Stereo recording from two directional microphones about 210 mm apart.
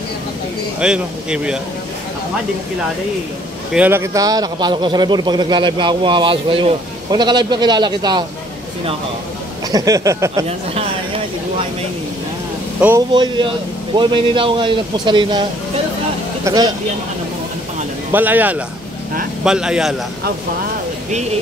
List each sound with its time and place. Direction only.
0.7 s speech: 5° right (ahead or behind)
3.7 s a man's voice: 10° right (ahead or behind)
9.7 s speech: 15° right (ahead or behind)
13.1 s a man's voice: 20° right (ahead or behind)
16.4 s a man's voice: 20° right (ahead or behind)
18.1 s speech: 10° right (ahead or behind)